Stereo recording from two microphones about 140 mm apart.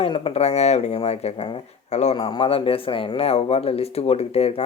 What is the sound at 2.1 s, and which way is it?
Speech, 40° left (ahead or behind).